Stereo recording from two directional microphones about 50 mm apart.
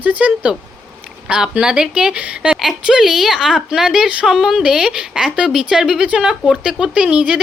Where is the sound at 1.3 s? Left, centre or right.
Centre.